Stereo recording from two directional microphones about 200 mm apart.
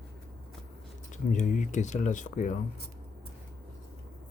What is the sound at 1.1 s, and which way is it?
Speech, 40° left (ahead or behind).